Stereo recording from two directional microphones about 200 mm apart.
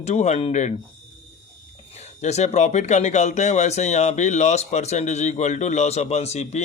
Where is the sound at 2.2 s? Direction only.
35° left (ahead or behind).